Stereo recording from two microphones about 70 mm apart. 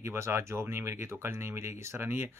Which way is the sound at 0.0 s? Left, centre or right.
Right.